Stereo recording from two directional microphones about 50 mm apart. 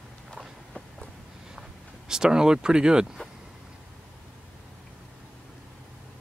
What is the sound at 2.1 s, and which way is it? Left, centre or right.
Speech, centre.